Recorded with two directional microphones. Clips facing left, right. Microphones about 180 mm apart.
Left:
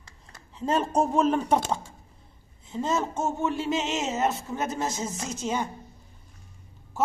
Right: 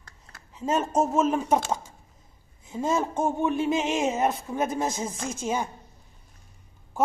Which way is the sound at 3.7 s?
20° left (ahead or behind).